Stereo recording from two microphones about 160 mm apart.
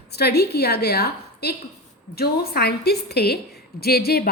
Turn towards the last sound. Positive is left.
turn(degrees=80)